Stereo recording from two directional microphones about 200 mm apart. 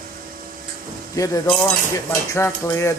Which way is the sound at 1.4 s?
5° left (ahead or behind).